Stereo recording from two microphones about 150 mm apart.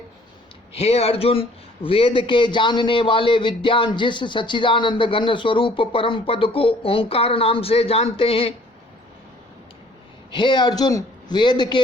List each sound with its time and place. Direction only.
0.7 s a man's voice: 45° left (ahead or behind)
10.3 s a man's voice: 30° left (ahead or behind)